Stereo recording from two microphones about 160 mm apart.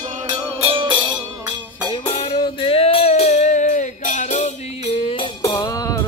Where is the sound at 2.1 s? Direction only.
30° left (ahead or behind).